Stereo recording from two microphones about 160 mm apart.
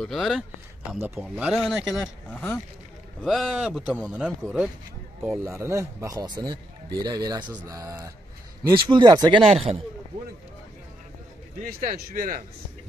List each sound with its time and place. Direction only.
0.0 s speech: centre (ahead or behind)
2.3 s speech: 10° left (ahead or behind)
3.2 s speech: centre (ahead or behind)
5.4 s speech: 15° right (ahead or behind)
11.8 s speech: 60° right (ahead or behind)